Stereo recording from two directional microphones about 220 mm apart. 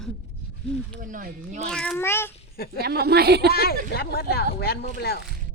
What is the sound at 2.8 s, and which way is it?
Speech, 45° right (ahead or behind).